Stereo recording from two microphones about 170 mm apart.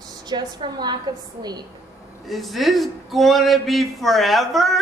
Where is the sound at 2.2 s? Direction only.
Centre (ahead or behind).